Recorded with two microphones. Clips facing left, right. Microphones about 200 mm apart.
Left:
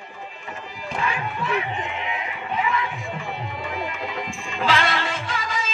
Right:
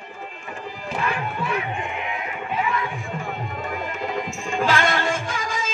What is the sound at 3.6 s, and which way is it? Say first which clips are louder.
Music: right 1 dB; 45° right (ahead or behind).